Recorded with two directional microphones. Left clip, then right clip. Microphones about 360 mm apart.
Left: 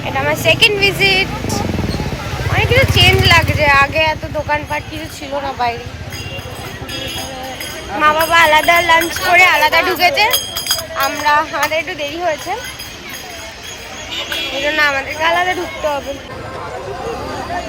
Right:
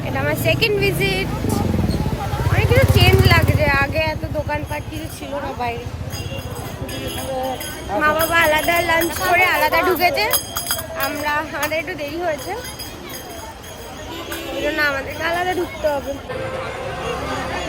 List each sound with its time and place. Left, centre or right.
0.2 s speech: centre
2.5 s speech: centre
8.0 s speech: centre
10.3 s a sound: centre
10.9 s speech: centre
14.6 s speech: centre